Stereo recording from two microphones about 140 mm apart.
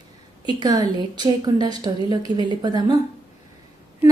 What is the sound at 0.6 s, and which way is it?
A woman's voice, 30° right (ahead or behind).